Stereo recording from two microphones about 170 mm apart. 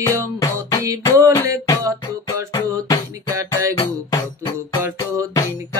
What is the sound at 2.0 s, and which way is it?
Music, 20° left (ahead or behind).